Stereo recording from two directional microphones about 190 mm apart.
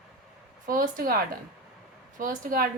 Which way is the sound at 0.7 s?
45° right (ahead or behind).